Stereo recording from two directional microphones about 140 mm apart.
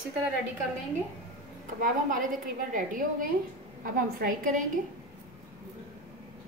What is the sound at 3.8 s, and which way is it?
Speech, 90° right.